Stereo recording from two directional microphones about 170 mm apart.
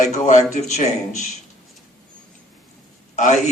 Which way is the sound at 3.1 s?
45° left (ahead or behind).